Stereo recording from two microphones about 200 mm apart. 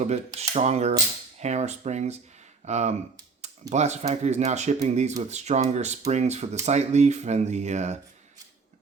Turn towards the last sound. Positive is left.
turn(degrees=-35)  # may be behind; listen again after turning